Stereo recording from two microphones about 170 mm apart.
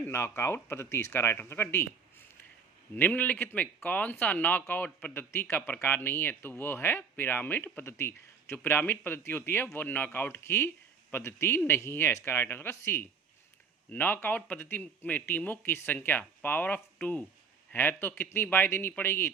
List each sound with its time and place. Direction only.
0.1 s speech: 15° left (ahead or behind)